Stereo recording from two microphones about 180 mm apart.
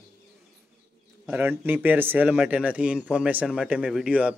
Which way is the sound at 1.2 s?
10° right (ahead or behind).